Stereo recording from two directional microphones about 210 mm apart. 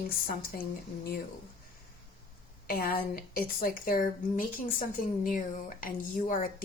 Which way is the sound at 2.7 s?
45° left (ahead or behind).